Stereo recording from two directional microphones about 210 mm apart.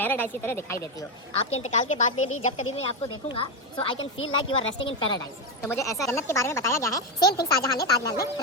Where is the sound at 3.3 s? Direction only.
25° left (ahead or behind).